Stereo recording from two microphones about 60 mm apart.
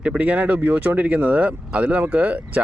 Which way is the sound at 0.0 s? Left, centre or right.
Right.